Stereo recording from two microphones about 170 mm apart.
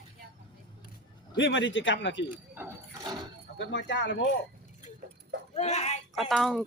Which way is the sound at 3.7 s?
90° left.